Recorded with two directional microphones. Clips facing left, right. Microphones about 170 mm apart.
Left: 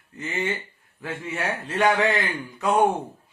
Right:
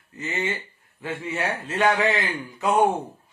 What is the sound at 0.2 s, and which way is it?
Speech, centre (ahead or behind).